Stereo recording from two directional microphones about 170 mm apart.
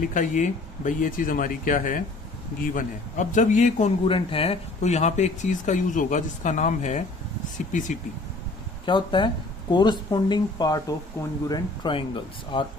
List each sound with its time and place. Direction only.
0.1 s speech: 45° left (ahead or behind)
8.9 s speech: 30° left (ahead or behind)